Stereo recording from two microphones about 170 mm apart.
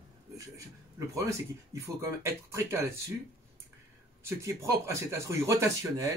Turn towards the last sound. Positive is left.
turn(degrees=-20)  # may be behind; listen again after turning